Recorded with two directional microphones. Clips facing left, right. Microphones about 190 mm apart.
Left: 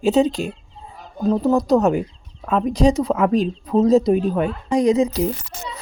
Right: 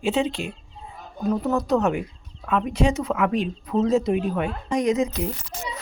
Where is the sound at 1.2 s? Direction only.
30° left (ahead or behind).